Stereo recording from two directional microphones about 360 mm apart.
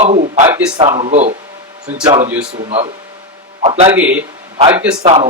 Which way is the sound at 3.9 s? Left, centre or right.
Centre.